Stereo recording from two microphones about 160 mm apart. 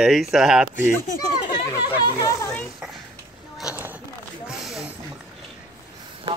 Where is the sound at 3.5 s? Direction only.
10° right (ahead or behind).